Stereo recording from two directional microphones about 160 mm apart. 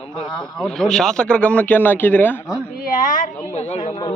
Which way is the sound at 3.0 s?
55° left (ahead or behind).